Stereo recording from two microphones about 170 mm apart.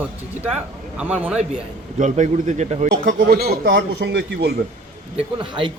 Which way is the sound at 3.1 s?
70° right (ahead or behind).